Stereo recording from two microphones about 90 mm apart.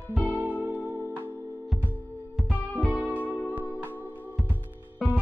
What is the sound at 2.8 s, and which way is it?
Music, 20° left (ahead or behind).